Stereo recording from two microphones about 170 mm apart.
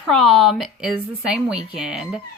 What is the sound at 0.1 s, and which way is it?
Speech, centre (ahead or behind).